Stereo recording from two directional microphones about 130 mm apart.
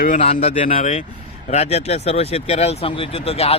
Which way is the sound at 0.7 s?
65° left (ahead or behind).